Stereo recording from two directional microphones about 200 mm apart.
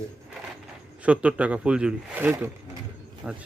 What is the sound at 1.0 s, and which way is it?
Speech, 5° right (ahead or behind).